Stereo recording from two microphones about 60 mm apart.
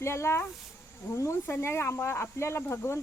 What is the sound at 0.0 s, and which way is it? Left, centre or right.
Speech, left.